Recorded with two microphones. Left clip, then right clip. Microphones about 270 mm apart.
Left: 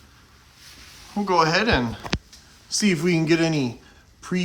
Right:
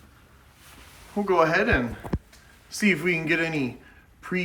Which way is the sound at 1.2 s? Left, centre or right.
Centre.